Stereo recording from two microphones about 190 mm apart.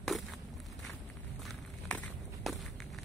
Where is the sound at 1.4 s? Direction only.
Centre (ahead or behind).